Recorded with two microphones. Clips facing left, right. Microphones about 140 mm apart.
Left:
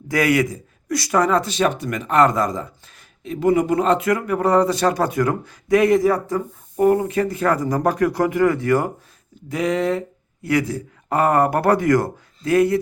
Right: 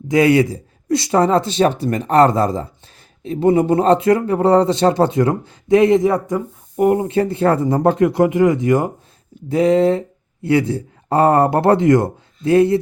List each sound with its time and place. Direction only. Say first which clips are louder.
0.1 s speech: right 5 dB; 25° right (ahead or behind)
9.5 s speech: right 7 dB; 30° right (ahead or behind)